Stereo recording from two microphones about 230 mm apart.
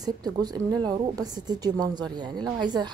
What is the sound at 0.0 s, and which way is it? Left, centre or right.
A woman's voice, centre.